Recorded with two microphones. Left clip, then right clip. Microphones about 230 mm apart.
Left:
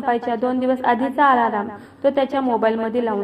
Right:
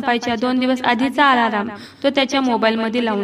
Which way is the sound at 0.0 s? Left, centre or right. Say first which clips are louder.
Right 1 dB; right.